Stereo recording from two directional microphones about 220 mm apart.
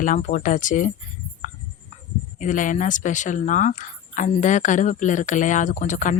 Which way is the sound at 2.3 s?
35° left (ahead or behind).